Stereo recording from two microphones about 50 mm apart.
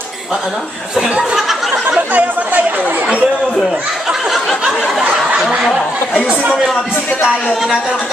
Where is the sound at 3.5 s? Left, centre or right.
Centre.